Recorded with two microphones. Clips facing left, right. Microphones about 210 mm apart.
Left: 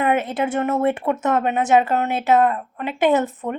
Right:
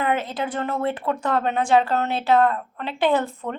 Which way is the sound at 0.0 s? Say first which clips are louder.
Left 4 dB; 20° left (ahead or behind).